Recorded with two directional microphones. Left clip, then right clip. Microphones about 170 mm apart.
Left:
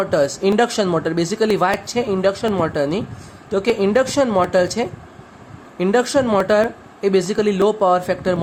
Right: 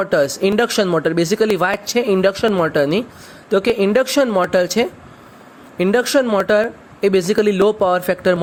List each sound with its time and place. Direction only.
0.0 s speech: 20° right (ahead or behind)